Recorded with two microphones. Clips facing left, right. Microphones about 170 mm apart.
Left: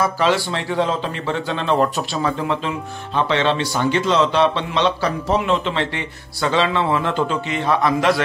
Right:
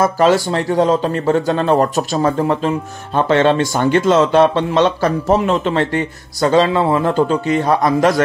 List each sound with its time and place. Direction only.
0.0 s a man's voice: 45° right (ahead or behind)